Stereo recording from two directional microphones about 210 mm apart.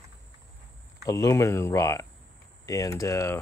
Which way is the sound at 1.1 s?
15° left (ahead or behind).